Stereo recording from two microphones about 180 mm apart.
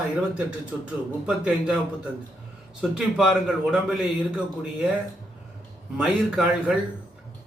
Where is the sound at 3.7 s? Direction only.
5° right (ahead or behind).